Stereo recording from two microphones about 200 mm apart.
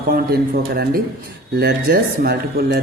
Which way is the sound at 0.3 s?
50° right (ahead or behind).